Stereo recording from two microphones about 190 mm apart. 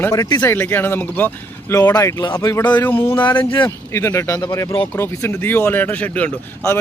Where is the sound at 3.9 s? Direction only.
15° left (ahead or behind).